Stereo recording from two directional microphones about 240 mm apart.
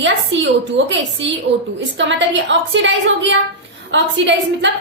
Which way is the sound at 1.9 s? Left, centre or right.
Right.